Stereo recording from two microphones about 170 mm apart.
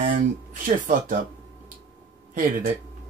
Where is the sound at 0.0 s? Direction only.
50° right (ahead or behind).